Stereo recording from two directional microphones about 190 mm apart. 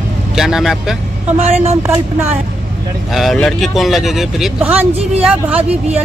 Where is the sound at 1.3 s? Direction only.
35° right (ahead or behind).